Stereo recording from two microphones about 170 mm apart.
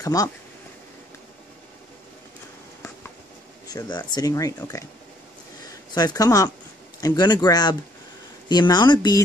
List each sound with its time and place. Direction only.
0.0 s speech: 20° left (ahead or behind)
3.6 s speech: 25° left (ahead or behind)
5.9 s speech: 25° left (ahead or behind)